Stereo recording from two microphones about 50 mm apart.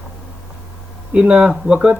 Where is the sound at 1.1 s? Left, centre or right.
Centre.